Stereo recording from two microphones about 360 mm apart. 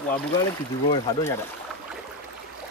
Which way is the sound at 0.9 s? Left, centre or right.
Centre.